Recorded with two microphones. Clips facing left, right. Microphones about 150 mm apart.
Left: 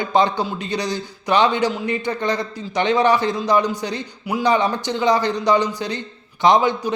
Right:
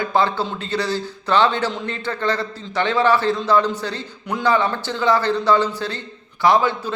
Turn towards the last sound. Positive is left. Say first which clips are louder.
# left 1 dB
turn(degrees=20)  # may be behind; listen again after turning